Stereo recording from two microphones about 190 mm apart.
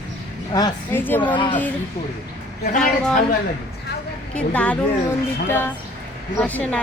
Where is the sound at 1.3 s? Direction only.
25° left (ahead or behind).